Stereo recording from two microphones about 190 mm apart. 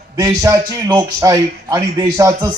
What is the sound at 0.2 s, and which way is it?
A man's voice, 15° right (ahead or behind).